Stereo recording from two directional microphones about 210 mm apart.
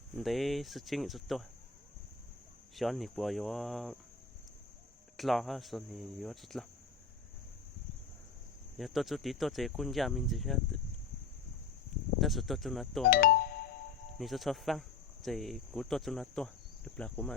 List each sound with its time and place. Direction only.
0.2 s speech: centre (ahead or behind)
2.7 s speech: centre (ahead or behind)
5.1 s speech: centre (ahead or behind)
8.8 s speech: centre (ahead or behind)
12.2 s speech: centre (ahead or behind)
13.1 s speech: 45° left (ahead or behind)
14.2 s cricket: centre (ahead or behind)